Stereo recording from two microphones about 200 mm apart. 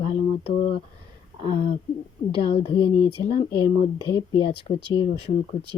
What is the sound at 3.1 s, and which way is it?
Speech, 30° left (ahead or behind).